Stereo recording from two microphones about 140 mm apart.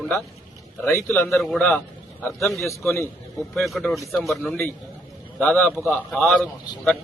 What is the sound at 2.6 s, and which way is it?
Speech, 20° left (ahead or behind).